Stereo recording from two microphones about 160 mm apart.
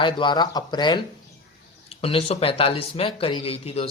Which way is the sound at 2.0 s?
35° left (ahead or behind).